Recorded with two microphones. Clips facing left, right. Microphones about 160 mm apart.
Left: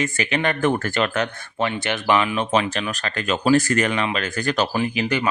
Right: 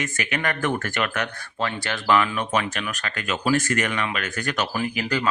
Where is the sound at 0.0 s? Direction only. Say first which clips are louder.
Left 5 dB; 30° left (ahead or behind).